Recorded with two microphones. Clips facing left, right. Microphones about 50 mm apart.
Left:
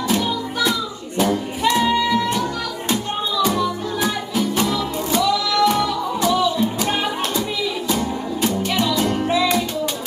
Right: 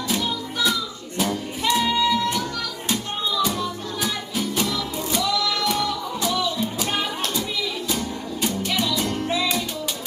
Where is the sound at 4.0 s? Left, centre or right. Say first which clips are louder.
Left 5 dB; centre.